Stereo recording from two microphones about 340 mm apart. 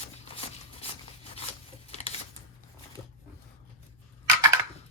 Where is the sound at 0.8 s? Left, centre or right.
Centre.